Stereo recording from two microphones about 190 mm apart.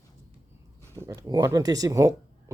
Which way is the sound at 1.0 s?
15° right (ahead or behind).